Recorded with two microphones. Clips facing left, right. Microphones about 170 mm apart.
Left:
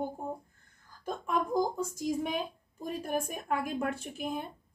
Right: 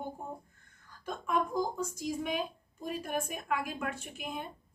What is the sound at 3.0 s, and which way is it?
A woman's voice, 35° left (ahead or behind).